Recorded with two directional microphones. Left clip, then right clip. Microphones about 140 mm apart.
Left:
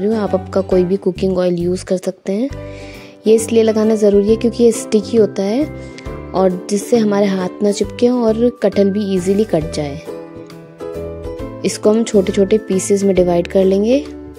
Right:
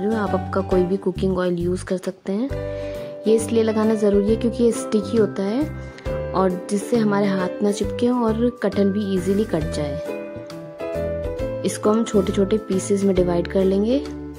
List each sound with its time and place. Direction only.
0.0 s speech: 45° left (ahead or behind)
11.6 s speech: 35° left (ahead or behind)